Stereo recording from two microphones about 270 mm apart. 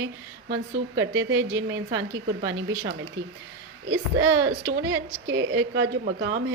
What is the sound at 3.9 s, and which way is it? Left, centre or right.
A woman's voice, right.